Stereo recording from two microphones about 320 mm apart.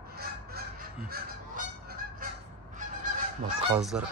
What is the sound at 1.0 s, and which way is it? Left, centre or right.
Goose, right.